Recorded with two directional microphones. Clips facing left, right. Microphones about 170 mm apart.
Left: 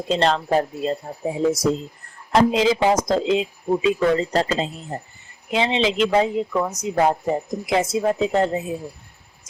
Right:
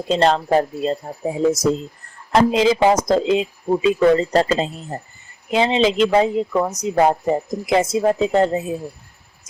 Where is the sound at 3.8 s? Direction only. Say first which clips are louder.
Right 5 dB; 40° right (ahead or behind).